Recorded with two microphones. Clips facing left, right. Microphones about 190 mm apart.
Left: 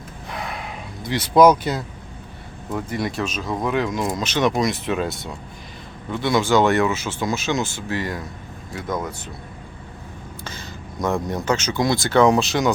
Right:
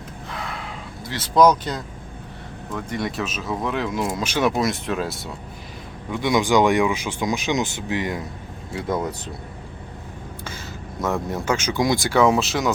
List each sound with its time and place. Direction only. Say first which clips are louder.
0.3 s a sound: left 2 dB; 15° left (ahead or behind)
2.7 s speech: left 2 dB; 5° left (ahead or behind)
6.1 s speech: even; 15° right (ahead or behind)
8.7 s speech: right 2 dB; 30° right (ahead or behind)
11.0 s speech: left 1 dB; 5° right (ahead or behind)